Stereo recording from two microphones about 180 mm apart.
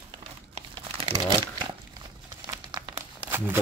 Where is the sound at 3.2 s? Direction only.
10° right (ahead or behind).